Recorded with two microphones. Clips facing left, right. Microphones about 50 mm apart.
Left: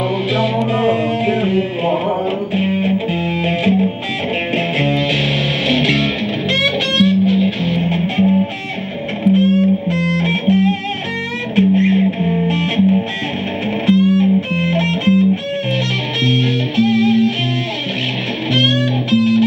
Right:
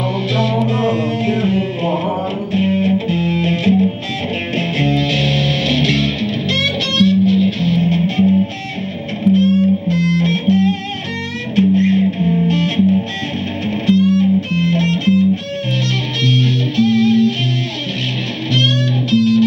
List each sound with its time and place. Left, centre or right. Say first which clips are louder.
0.7 s music: left 1 dB; centre
9.3 s music: even; centre
16.3 s music: right 1 dB; centre
18.5 s music: left 1 dB; centre